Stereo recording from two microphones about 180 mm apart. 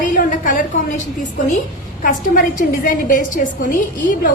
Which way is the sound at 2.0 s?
50° left (ahead or behind).